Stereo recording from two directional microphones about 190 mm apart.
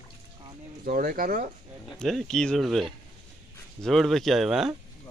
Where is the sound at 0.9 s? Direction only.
50° right (ahead or behind).